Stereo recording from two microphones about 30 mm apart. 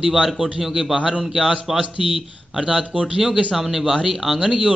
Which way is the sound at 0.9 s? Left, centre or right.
Right.